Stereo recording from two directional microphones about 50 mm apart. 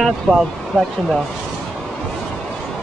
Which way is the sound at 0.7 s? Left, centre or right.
Left.